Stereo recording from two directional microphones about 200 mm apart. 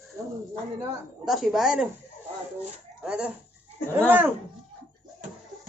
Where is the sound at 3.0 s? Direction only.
5° right (ahead or behind).